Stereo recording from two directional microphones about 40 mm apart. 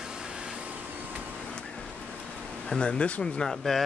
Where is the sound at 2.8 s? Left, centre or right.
Left.